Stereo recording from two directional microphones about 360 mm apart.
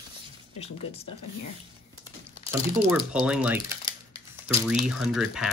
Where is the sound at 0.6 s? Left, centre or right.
Centre.